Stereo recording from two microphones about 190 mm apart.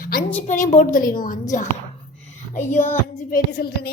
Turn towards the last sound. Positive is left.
turn(degrees=50)  # may be behind; listen again after turning